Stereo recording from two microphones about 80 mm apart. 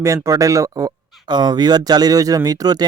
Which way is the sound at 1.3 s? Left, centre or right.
Right.